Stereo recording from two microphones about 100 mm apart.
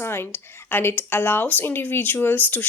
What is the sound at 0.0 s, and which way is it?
Speech, 25° left (ahead or behind).